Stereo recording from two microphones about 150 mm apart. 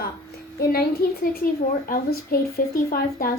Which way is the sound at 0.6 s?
85° left.